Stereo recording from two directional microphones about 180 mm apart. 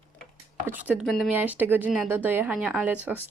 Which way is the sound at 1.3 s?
10° right (ahead or behind).